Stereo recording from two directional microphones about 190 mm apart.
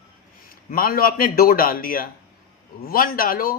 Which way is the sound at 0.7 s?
50° left (ahead or behind).